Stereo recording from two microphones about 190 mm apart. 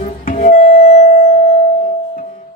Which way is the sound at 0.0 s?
40° left (ahead or behind).